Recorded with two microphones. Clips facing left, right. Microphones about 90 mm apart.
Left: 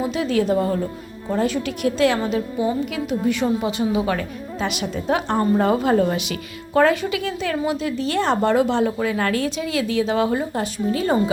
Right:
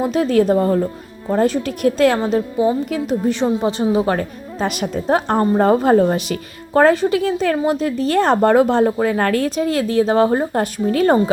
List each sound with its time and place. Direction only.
0.0 s a woman's voice: 45° right (ahead or behind)